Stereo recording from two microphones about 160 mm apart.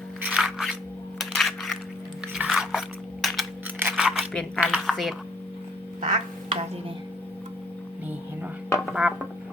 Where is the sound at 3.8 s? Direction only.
10° right (ahead or behind).